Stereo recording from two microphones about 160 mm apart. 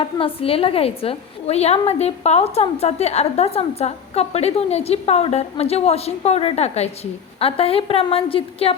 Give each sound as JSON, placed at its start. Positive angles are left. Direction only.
{"t": 0.0, "sound": "a woman's voice", "side_deg": 35}